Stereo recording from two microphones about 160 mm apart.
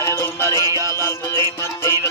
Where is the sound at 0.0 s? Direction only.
15° left (ahead or behind).